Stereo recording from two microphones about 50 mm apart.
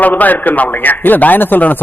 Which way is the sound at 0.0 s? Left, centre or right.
Left.